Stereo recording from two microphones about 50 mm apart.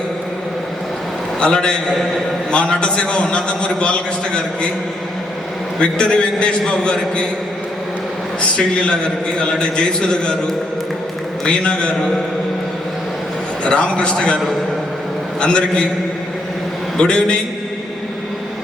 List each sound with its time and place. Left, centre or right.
1.4 s a man's voice: centre
5.8 s a man's voice: centre
9.4 s a man's voice: centre
11.4 s a man's voice: centre
13.7 s a man's voice: left
17.0 s a man's voice: centre